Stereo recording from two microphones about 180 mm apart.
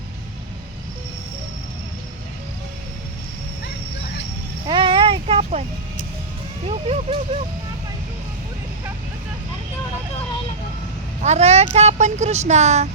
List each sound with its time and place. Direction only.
4.6 s a sound: 30° right (ahead or behind)
6.7 s speech: 35° right (ahead or behind)
11.2 s speech: 40° right (ahead or behind)